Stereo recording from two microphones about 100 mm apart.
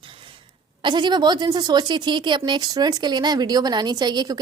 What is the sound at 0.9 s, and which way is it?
Speech, 50° right (ahead or behind).